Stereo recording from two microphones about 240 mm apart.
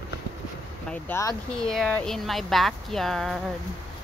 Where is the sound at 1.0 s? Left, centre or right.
Centre.